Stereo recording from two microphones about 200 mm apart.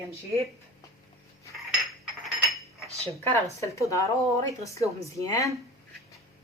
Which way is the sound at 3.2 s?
10° left (ahead or behind).